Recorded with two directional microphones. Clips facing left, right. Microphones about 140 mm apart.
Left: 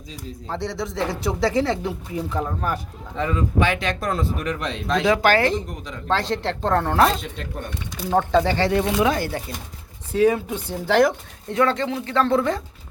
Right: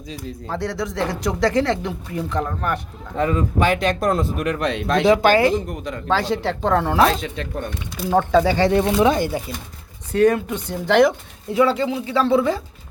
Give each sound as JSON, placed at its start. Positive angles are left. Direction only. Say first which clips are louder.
{"t": 0.4, "sound": "speech", "louder": "right 2 dB", "side_deg": 0}
{"t": 2.7, "sound": "a man's voice", "louder": "right 4 dB", "side_deg": -50}
{"t": 5.0, "sound": "speech", "louder": "right 3 dB", "side_deg": -15}
{"t": 7.1, "sound": "speech", "louder": "right 3 dB", "side_deg": -80}
{"t": 8.1, "sound": "speech", "louder": "right 2 dB", "side_deg": -5}
{"t": 8.7, "sound": "speech", "louder": "right 3 dB", "side_deg": -30}
{"t": 10.1, "sound": "speech", "louder": "right 2 dB", "side_deg": 5}